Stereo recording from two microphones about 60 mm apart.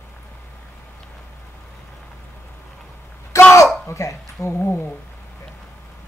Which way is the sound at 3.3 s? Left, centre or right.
Left.